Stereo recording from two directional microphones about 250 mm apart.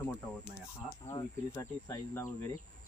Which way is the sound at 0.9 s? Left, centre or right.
Centre.